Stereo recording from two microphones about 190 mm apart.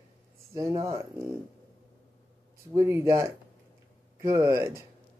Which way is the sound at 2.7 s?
15° right (ahead or behind).